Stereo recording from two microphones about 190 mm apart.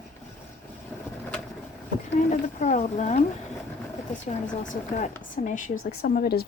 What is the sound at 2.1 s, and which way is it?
Speech, 40° left (ahead or behind).